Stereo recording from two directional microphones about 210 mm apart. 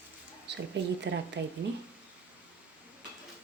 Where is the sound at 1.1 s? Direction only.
60° right (ahead or behind).